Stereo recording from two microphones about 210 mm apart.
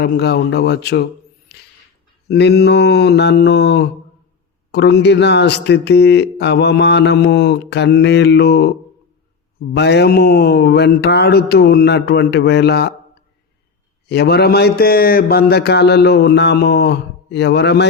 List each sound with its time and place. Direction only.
0.0 s speech: 50° left (ahead or behind)
1.5 s a sound: 50° left (ahead or behind)
2.2 s speech: 50° left (ahead or behind)
9.7 s speech: 55° left (ahead or behind)
14.1 s speech: 50° left (ahead or behind)